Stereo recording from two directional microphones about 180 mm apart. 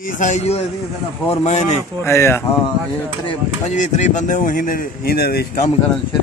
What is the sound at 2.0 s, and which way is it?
Speech, 15° left (ahead or behind).